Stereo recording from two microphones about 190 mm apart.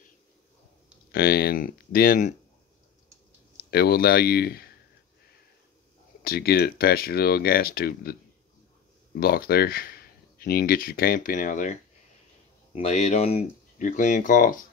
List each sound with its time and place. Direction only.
1.1 s speech: 55° left (ahead or behind)
3.7 s speech: 55° left (ahead or behind)
6.2 s speech: 55° left (ahead or behind)